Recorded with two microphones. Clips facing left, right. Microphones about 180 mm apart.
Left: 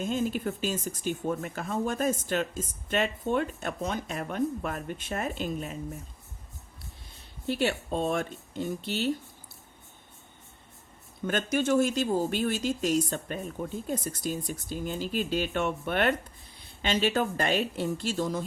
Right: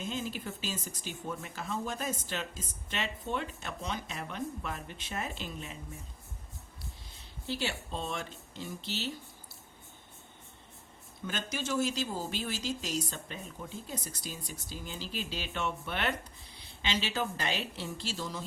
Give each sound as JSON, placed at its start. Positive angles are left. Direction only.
{"t": 0.0, "sound": "speech", "side_deg": 50}
{"t": 7.4, "sound": "speech", "side_deg": 55}
{"t": 11.3, "sound": "speech", "side_deg": 55}